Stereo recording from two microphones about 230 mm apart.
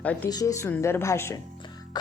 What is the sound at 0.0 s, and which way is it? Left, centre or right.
A woman's voice, centre.